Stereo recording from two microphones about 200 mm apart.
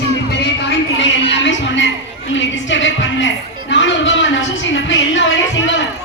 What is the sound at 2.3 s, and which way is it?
Music, 70° left (ahead or behind).